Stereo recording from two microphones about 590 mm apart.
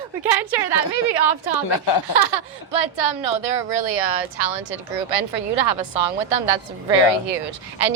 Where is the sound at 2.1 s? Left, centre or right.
Right.